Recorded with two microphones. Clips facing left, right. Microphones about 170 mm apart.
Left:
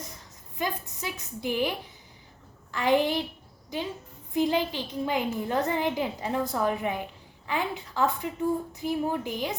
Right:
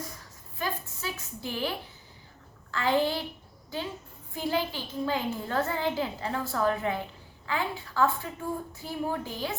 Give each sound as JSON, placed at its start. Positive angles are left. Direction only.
{"t": 0.6, "sound": "a woman's voice", "side_deg": 15}
{"t": 2.7, "sound": "a woman's voice", "side_deg": 15}
{"t": 4.4, "sound": "a woman's voice", "side_deg": 20}